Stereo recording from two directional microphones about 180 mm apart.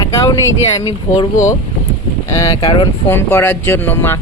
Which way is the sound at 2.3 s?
20° left (ahead or behind).